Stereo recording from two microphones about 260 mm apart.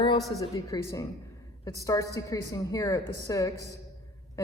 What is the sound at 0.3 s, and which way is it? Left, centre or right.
A woman's voice, centre.